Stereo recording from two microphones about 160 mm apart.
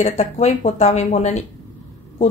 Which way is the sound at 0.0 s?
45° left (ahead or behind).